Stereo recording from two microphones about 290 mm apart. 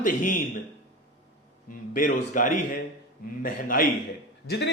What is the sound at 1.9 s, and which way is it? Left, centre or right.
Speech, left.